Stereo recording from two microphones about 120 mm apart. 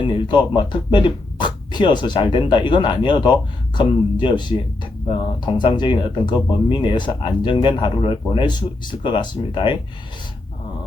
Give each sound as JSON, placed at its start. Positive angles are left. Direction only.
{"t": 0.0, "sound": "speech", "side_deg": 40}